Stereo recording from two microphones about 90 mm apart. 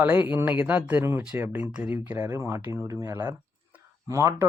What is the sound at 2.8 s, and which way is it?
Speech, 35° right (ahead or behind).